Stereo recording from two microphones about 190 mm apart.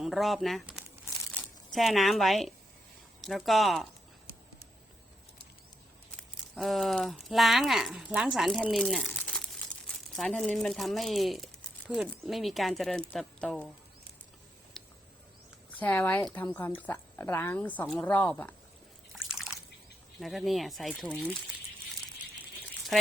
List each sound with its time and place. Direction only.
0.0 s speech: centre (ahead or behind)
6.5 s speech: centre (ahead or behind)
14.8 s a sound: centre (ahead or behind)
15.8 s speech: 10° left (ahead or behind)
19.1 s water: centre (ahead or behind)
20.1 s speech: centre (ahead or behind)